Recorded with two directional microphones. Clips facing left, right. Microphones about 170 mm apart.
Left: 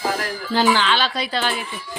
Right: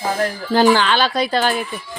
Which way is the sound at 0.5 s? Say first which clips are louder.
Right 4 dB; 45° right (ahead or behind).